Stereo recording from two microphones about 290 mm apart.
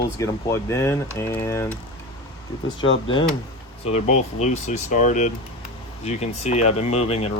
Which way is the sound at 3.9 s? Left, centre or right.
Left.